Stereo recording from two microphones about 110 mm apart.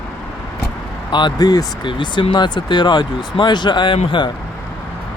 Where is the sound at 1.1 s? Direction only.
45° left (ahead or behind).